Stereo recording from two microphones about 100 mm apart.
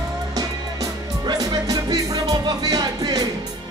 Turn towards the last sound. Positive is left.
turn(degrees=-40)  # may be behind; listen again after turning